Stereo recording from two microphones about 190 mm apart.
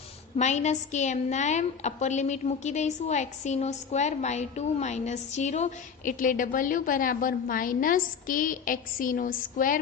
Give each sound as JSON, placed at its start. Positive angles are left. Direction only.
{"t": 0.3, "sound": "a woman's voice", "side_deg": 40}